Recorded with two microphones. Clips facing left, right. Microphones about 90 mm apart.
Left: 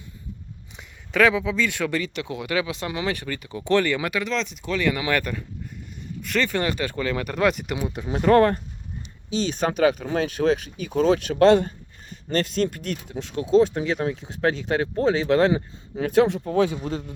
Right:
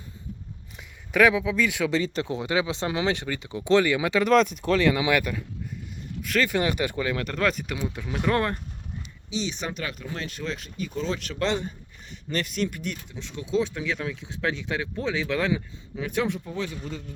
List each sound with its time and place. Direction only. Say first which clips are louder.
0.8 s speech: even; 5° right (ahead or behind)
2.3 s speech: left 2 dB; 25° right (ahead or behind)
4.2 s speech: right 7 dB; 50° right (ahead or behind)
4.8 s speech: even; 25° right (ahead or behind)
5.0 s speech: even; 10° right (ahead or behind)
7.2 s speech: left 7 dB; 10° left (ahead or behind)
8.2 s speech: left 8 dB; 40° left (ahead or behind)
9.6 s speech: left 12 dB; 90° left; by 11.7 s 55° left (ahead or behind)
12.3 s speech: left 5 dB; 35° left (ahead or behind)
16.5 s speech: left 10 dB; 65° left (ahead or behind)